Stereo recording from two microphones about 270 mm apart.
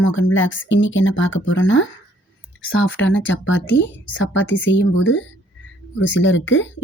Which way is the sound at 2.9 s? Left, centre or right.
Left.